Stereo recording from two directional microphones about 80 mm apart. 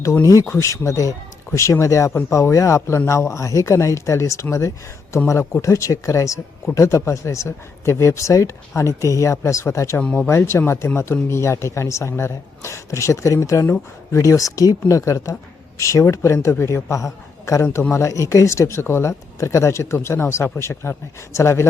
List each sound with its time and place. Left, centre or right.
0.0 s speech: left
5.6 s speech: left